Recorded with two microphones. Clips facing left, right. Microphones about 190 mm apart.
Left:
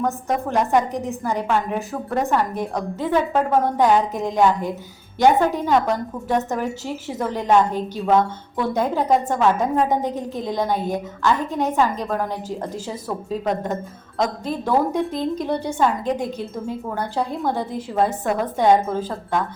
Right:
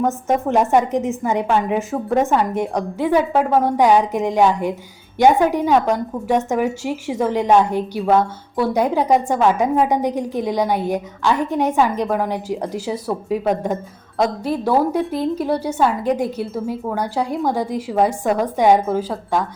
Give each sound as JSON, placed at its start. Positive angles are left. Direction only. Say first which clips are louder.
{"t": 0.0, "sound": "a woman's voice", "louder": "right 4 dB", "side_deg": -20}